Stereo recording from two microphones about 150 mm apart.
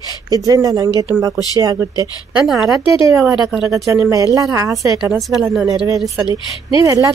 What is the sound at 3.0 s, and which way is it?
Speech, 20° right (ahead or behind).